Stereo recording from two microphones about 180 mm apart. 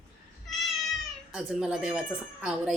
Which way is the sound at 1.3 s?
5° right (ahead or behind).